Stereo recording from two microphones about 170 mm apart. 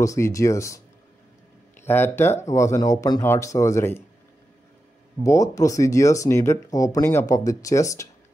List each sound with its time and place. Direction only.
0.0 s speech: 20° left (ahead or behind)
1.9 s speech: 15° left (ahead or behind)
5.2 s speech: 20° left (ahead or behind)